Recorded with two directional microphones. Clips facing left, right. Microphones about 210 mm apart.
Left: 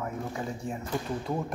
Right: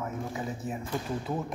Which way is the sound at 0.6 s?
5° right (ahead or behind).